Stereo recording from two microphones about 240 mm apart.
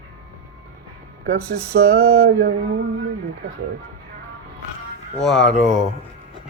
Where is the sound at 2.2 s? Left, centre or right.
Right.